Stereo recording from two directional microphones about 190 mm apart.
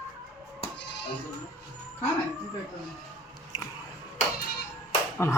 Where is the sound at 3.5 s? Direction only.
20° left (ahead or behind).